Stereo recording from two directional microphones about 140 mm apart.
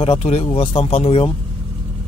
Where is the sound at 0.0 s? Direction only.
45° left (ahead or behind).